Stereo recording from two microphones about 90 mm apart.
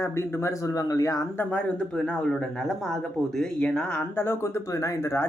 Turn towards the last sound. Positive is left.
turn(degrees=30)  # may be behind; listen again after turning